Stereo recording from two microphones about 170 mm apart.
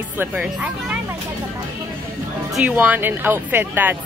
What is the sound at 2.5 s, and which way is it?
Speech, 10° right (ahead or behind).